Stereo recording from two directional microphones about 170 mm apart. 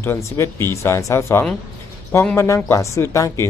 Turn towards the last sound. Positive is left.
turn(degrees=15)  # may be behind; listen again after turning